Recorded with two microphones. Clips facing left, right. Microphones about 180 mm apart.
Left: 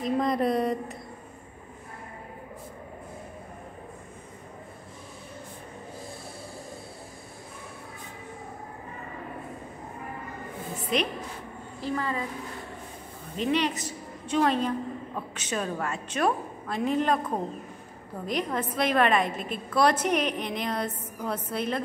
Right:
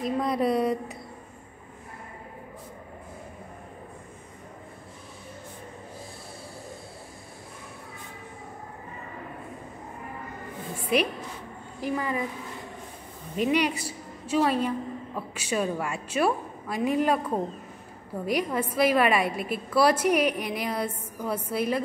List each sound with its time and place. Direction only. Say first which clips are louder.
0.0 s speech: even; 5° right (ahead or behind)
10.9 s a woman's voice: right 3 dB; 5° right (ahead or behind)
13.4 s a woman's voice: right 2 dB; 10° right (ahead or behind)
18.2 s a woman's voice: right 2 dB; 10° right (ahead or behind)